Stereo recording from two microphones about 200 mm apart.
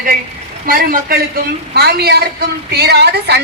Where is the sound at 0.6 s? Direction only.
45° right (ahead or behind).